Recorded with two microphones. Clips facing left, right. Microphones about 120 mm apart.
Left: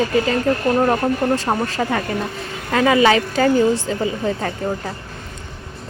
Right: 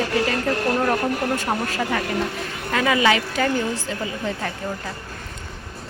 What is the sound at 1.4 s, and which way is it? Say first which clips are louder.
A woman's voice: left 4 dB; 35° left (ahead or behind).